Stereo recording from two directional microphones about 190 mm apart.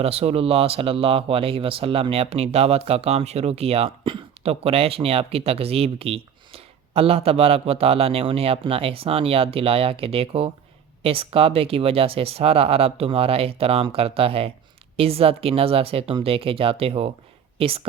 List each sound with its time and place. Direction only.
0.0 s speech: 30° right (ahead or behind)